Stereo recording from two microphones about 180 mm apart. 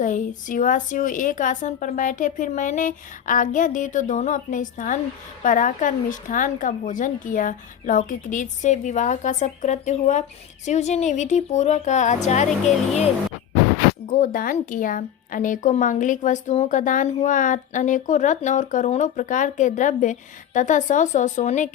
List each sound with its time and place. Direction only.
0.0 s a woman's voice: 45° left (ahead or behind)
14.1 s a woman's voice: 50° left (ahead or behind)